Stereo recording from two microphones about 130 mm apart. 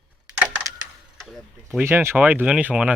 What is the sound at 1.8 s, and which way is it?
Speech, 20° right (ahead or behind).